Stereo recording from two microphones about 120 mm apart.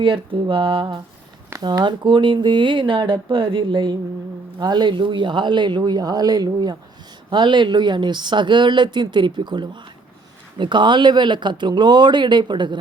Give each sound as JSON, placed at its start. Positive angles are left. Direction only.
{"t": 0.0, "sound": "speech", "side_deg": -45}